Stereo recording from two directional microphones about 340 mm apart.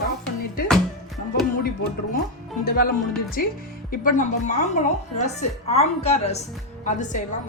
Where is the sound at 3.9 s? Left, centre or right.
Left.